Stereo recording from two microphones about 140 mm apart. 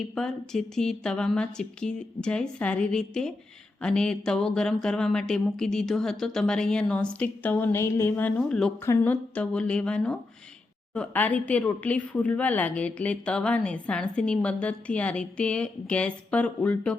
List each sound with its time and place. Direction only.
0.0 s a woman's voice: 5° left (ahead or behind)